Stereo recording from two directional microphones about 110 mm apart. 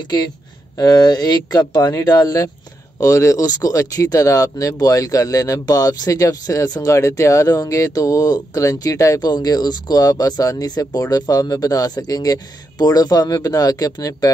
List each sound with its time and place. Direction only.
0.7 s speech: 35° left (ahead or behind)